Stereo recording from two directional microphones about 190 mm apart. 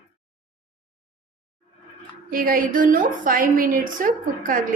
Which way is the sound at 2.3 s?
45° right (ahead or behind).